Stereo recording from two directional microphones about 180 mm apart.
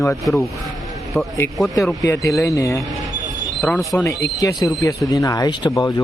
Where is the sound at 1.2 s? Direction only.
Centre (ahead or behind).